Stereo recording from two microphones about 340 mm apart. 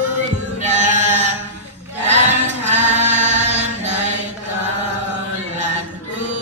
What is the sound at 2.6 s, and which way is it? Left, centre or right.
Music, centre.